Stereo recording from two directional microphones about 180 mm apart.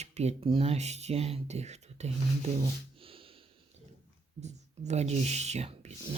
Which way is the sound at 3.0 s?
30° right (ahead or behind).